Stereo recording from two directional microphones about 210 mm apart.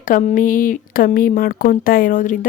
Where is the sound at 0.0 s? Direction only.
35° left (ahead or behind).